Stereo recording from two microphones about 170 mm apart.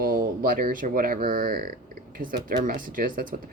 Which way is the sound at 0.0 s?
55° right (ahead or behind).